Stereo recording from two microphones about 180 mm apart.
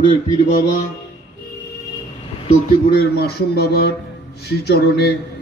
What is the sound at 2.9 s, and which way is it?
Speech, 60° left (ahead or behind).